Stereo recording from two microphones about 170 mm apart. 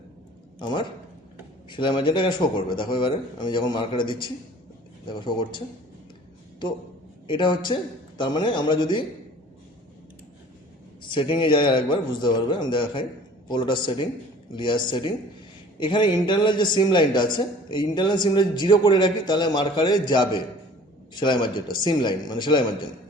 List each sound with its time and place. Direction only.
0.6 s a man's voice: 30° left (ahead or behind)
7.3 s a man's voice: 30° left (ahead or behind)
11.1 s a man's voice: 30° left (ahead or behind)